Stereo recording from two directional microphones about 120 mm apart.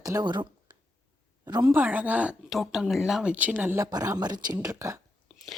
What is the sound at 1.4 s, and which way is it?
Speech, 35° right (ahead or behind).